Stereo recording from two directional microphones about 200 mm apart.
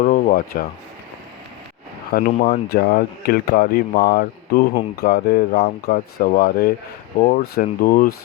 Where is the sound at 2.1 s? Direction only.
45° left (ahead or behind).